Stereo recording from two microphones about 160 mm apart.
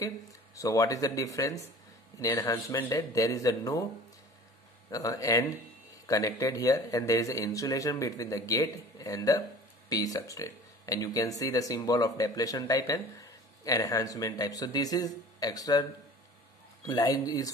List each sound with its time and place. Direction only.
0.6 s speech: 20° left (ahead or behind)
4.9 s speech: 20° left (ahead or behind)
16.8 s speech: 20° left (ahead or behind)